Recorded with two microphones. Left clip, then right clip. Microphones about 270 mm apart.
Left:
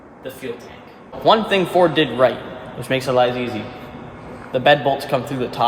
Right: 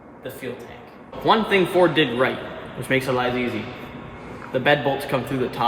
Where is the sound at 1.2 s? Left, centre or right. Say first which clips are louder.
Left 3 dB; left.